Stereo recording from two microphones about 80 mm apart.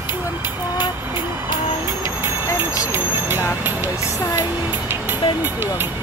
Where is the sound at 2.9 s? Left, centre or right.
Right.